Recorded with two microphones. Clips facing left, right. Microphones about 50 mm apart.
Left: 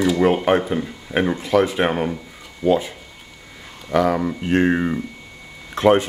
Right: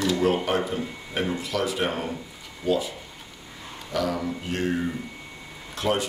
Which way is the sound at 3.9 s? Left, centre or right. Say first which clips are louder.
Left 8 dB; left.